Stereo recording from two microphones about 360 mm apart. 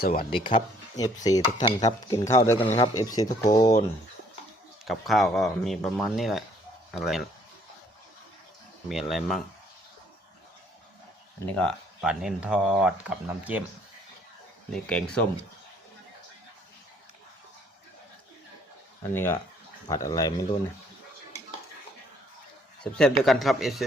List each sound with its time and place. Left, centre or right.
0.0 s speech: left
0.3 s dishes: centre
4.9 s speech: centre
8.9 s speech: centre
11.4 s speech: centre
14.7 s speech: centre
19.1 s dishes: centre
22.8 s speech: centre